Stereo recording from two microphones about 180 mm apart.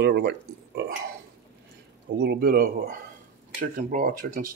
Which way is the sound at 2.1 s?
60° right (ahead or behind).